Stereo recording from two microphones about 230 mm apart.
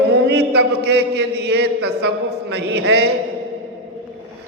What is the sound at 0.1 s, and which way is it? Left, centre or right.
A man's voice, right.